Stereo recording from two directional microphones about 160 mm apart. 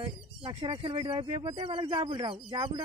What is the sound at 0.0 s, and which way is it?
Speech, 35° right (ahead or behind).